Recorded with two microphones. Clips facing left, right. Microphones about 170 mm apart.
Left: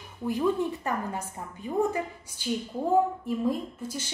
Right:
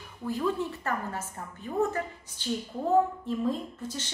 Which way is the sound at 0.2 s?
15° left (ahead or behind).